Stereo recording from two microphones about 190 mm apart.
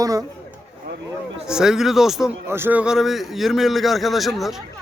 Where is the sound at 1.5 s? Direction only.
5° right (ahead or behind).